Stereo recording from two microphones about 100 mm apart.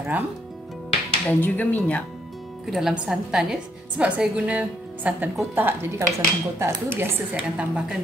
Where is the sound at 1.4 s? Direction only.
20° left (ahead or behind).